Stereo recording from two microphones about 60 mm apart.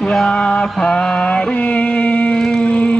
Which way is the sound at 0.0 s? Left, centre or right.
Centre.